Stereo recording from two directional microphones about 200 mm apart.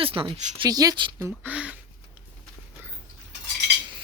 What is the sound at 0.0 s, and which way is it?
Speech, 25° right (ahead or behind).